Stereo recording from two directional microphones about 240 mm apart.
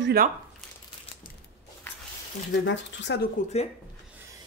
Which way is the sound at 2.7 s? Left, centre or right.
Left.